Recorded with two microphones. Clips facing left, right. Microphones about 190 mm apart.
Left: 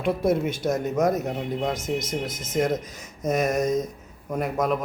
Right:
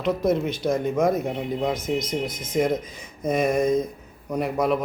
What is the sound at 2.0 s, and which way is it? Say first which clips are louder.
Speech: right 2 dB; 45° left (ahead or behind).